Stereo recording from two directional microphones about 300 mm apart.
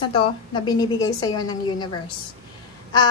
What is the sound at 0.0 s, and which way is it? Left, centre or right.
A woman's voice, centre.